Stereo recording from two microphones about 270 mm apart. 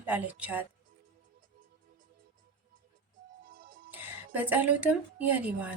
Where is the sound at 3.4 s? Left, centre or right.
Right.